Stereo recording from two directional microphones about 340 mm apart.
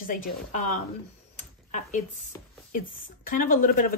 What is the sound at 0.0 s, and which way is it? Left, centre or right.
Speech, left.